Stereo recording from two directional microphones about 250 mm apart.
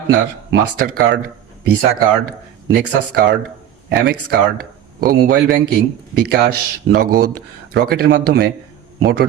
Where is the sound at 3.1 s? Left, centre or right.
Right.